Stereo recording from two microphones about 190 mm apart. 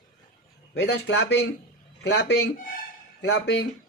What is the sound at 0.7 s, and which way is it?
Speech, 65° left (ahead or behind).